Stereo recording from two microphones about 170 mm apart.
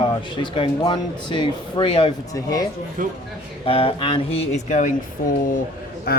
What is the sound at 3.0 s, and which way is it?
Speech, 55° right (ahead or behind).